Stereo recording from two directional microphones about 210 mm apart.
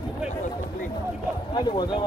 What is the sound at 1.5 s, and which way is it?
Speech, 20° left (ahead or behind).